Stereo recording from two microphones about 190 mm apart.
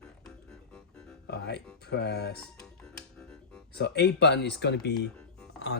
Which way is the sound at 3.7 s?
60° left (ahead or behind).